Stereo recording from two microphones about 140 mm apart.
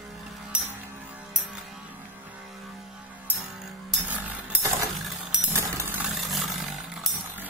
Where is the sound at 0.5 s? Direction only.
10° right (ahead or behind).